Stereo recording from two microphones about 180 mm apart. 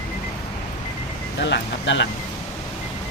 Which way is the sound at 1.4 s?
80° left.